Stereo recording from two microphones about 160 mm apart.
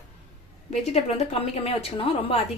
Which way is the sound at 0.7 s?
40° left (ahead or behind).